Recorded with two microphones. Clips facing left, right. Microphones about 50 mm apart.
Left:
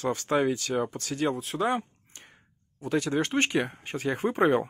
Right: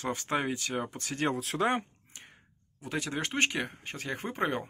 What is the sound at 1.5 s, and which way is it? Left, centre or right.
Speech, right.